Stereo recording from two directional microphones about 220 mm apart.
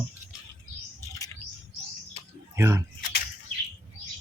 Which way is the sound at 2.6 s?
10° right (ahead or behind).